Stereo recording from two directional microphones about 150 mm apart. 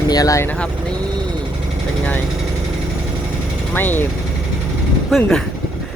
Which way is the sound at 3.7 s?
15° left (ahead or behind).